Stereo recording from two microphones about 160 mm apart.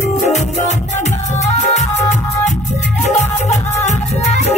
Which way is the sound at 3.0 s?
45° left (ahead or behind).